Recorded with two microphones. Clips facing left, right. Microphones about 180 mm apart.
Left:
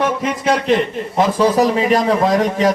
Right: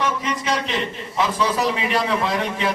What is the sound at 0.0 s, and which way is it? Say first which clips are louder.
A man's voice: left 6 dB; 50° left (ahead or behind).